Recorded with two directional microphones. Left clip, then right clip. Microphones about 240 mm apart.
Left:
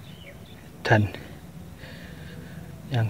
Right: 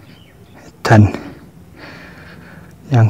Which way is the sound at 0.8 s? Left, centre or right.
Right.